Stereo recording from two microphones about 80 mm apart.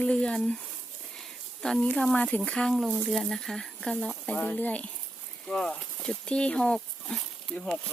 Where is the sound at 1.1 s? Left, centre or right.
Centre.